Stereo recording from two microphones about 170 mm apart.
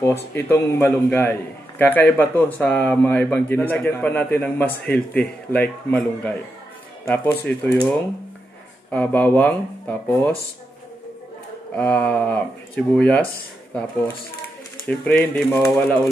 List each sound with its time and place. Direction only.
0.0 s speech: 15° left (ahead or behind)
8.9 s speech: 10° left (ahead or behind)
11.7 s speech: 10° left (ahead or behind)
14.9 s speech: 5° left (ahead or behind)